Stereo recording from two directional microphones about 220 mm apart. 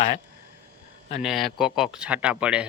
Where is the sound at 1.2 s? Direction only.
Centre (ahead or behind).